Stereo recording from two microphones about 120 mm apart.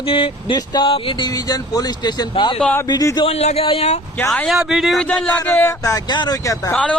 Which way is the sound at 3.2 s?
60° left (ahead or behind).